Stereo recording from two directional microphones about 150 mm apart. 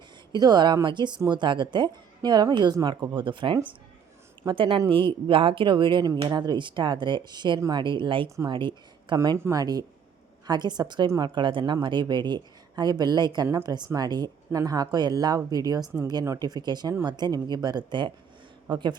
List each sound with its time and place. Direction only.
0.3 s a woman's voice: 25° right (ahead or behind)
9.1 s a woman's voice: 25° right (ahead or behind)